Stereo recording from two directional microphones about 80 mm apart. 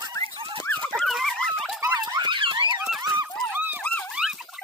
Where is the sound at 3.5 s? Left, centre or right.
Right.